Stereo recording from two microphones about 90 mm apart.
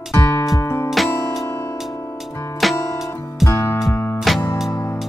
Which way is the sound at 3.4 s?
35° left (ahead or behind).